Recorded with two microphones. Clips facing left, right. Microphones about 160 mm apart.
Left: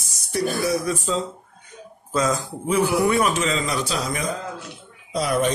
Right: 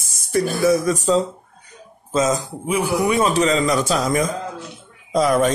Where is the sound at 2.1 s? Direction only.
20° right (ahead or behind).